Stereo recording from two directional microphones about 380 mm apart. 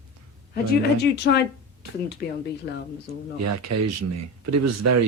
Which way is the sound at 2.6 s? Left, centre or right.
Left.